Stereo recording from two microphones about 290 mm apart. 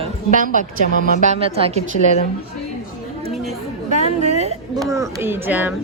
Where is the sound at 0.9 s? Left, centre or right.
Left.